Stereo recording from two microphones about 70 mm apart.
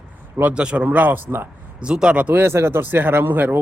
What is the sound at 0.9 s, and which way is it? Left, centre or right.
Speech, right.